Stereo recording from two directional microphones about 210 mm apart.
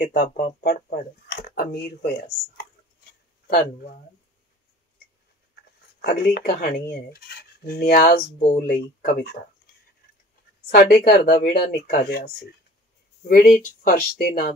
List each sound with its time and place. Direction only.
0.1 s speech: 40° left (ahead or behind)
0.6 s cutlery: 40° left (ahead or behind)
3.4 s speech: 45° left (ahead or behind)
5.9 s cutlery: 45° left (ahead or behind)
10.7 s cutlery: 45° left (ahead or behind)
13.3 s cutlery: 45° left (ahead or behind)